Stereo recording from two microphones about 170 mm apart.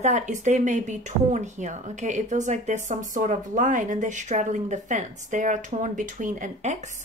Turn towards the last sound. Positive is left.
turn(degrees=-45)  # may be behind; listen again after turning